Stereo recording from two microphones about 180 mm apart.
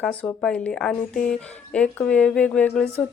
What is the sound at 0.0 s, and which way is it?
Speech, 5° left (ahead or behind).